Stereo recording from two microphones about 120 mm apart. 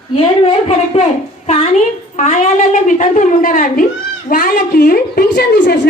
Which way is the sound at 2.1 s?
90° left.